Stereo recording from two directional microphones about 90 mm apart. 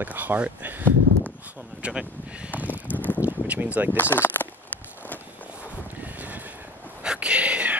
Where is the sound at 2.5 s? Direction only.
20° right (ahead or behind).